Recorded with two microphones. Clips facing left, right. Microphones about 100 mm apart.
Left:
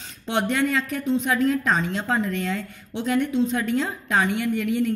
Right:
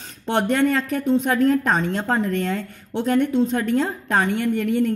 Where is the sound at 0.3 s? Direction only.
45° right (ahead or behind).